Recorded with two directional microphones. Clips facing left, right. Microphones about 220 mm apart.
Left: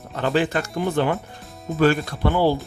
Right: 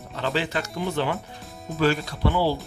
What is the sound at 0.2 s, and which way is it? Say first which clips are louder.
Speech: left 5 dB; 50° left (ahead or behind).